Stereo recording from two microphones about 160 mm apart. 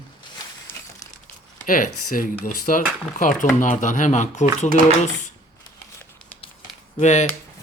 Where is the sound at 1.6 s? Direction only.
55° left (ahead or behind).